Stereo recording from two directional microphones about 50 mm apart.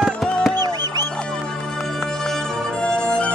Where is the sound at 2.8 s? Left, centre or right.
Centre.